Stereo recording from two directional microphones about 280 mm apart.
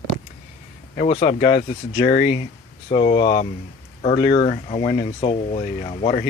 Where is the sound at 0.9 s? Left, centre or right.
Left.